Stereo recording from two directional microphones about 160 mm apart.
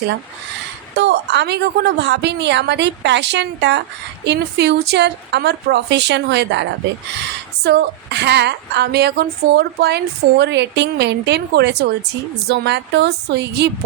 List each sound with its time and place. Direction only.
0.9 s a woman's voice: 90° right